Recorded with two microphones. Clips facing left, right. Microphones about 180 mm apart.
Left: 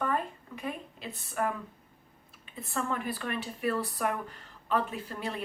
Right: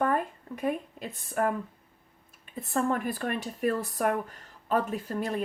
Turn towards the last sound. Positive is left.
turn(degrees=-45)  # may be behind; listen again after turning